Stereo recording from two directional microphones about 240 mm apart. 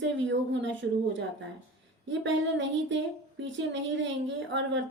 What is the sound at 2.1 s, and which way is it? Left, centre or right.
A woman's voice, right.